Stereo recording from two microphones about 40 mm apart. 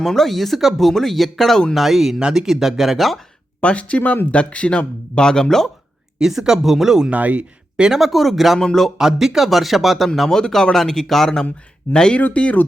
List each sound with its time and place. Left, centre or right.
0.0 s speech: centre
3.6 s speech: left; by 5.7 s centre
6.1 s speech: centre
7.1 s speech: right
7.8 s speech: centre
9.0 s speech: centre
10.2 s speech: centre
11.9 s speech: left
12.3 s speech: left